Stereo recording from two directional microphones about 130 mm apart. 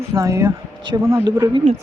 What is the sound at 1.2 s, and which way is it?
Speech, 35° right (ahead or behind).